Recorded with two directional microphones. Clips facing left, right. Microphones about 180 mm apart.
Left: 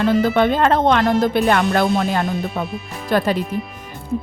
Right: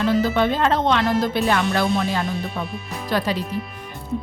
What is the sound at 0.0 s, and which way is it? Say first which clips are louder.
Speech: left 3 dB; 55° left (ahead or behind).